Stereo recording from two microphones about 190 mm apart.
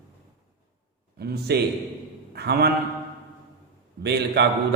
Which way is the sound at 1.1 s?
60° right (ahead or behind).